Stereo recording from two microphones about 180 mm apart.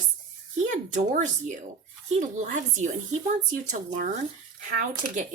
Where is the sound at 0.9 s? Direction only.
45° right (ahead or behind).